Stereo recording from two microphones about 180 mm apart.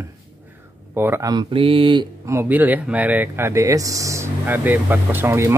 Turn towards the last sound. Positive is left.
turn(degrees=-15)  # may be behind; listen again after turning